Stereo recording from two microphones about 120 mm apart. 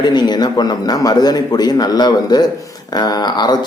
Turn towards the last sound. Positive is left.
turn(degrees=35)  # may be behind; listen again after turning